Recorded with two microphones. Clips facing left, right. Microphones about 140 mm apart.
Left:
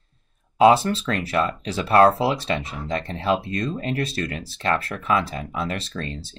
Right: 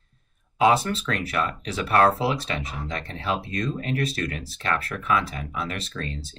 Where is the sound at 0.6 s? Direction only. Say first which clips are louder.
Left 5 dB; 30° left (ahead or behind).